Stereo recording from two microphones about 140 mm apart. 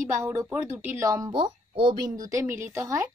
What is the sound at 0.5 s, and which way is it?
Speech, 10° right (ahead or behind).